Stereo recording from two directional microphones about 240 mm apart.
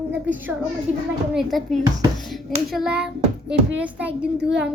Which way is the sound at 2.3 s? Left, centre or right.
Centre.